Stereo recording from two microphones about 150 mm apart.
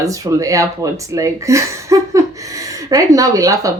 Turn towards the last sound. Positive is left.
turn(degrees=-20)  # may be behind; listen again after turning